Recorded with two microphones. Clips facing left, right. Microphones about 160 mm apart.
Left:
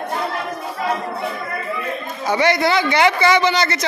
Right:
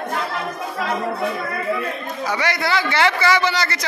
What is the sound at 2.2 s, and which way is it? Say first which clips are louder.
A man's voice: left 6 dB; 25° left (ahead or behind).